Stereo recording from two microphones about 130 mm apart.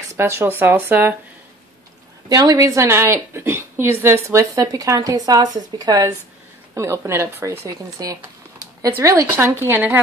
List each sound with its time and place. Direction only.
0.2 s speech: 20° right (ahead or behind)
2.2 s a woman's voice: 30° right (ahead or behind)